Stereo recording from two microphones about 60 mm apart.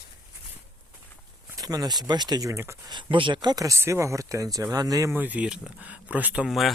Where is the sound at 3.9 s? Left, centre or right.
Right.